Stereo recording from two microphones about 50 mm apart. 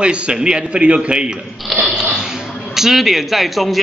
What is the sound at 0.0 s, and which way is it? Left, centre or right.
A man's voice, right.